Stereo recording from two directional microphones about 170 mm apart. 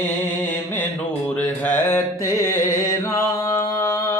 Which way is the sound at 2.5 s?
15° left (ahead or behind).